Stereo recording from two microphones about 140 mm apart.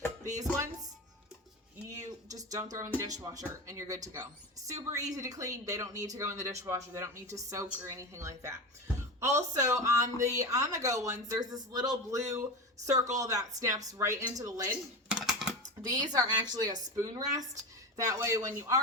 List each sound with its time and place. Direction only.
1.9 s speech: 25° right (ahead or behind)
15.1 s typing: centre (ahead or behind)
16.1 s speech: 25° right (ahead or behind)